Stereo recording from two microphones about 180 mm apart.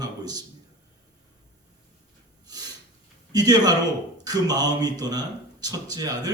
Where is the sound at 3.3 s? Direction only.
20° right (ahead or behind).